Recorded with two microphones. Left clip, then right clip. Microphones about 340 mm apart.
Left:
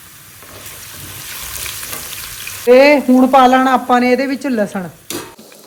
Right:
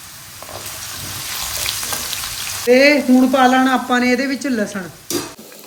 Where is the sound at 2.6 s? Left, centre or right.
Centre.